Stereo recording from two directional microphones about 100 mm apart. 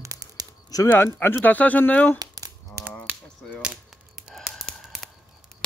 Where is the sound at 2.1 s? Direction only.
35° right (ahead or behind).